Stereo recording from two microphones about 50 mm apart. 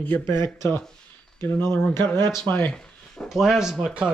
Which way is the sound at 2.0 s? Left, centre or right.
Left.